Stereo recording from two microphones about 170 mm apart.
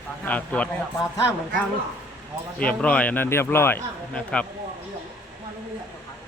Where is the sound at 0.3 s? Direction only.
10° left (ahead or behind).